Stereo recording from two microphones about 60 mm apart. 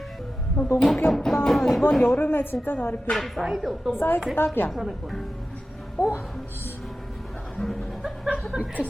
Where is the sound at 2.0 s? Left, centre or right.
Left.